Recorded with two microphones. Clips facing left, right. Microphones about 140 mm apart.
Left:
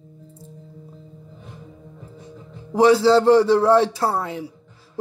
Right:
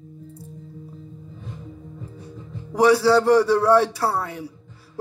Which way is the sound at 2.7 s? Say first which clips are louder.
Left 2 dB; 20° left (ahead or behind).